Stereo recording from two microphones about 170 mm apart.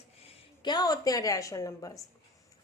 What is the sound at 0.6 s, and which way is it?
A woman's voice, 25° left (ahead or behind).